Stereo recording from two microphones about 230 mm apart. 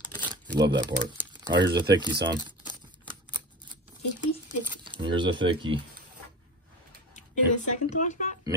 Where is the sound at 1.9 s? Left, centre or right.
Centre.